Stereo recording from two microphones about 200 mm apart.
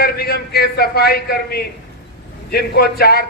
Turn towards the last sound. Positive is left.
turn(degrees=50)  # may be behind; listen again after turning